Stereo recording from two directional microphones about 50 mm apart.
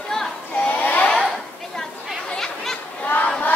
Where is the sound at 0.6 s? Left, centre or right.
Left.